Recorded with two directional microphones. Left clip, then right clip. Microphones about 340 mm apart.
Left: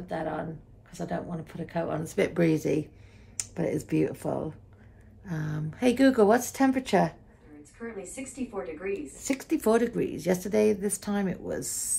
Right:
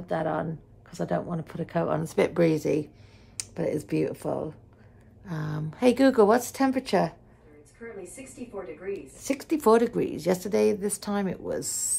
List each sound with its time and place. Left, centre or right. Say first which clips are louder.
0.1 s speech: right 4 dB; centre
8.9 s speech: right 3 dB; centre